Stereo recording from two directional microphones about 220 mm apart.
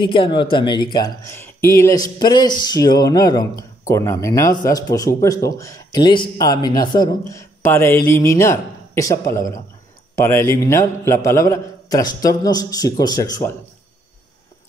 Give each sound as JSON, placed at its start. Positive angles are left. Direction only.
{"t": 0.0, "sound": "speech", "side_deg": 20}